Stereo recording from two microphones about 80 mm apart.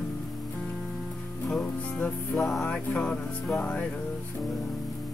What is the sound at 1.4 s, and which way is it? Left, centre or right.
Music, centre.